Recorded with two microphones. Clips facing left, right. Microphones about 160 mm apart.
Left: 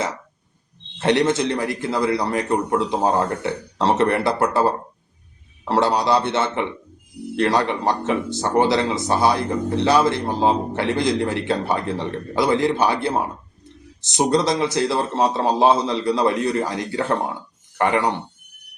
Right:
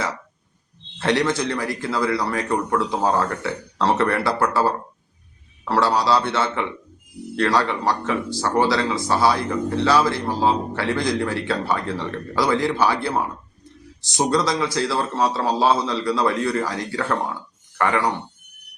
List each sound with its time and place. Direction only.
0.9 s speech: 20° left (ahead or behind)